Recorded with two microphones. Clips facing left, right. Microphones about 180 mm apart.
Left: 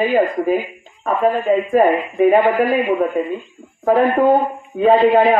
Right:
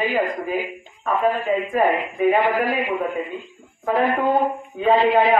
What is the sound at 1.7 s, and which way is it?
Speech, 40° left (ahead or behind).